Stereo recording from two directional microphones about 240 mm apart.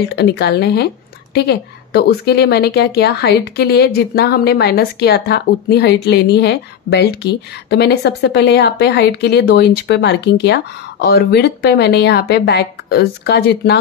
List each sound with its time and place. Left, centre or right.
0.1 s a woman's voice: left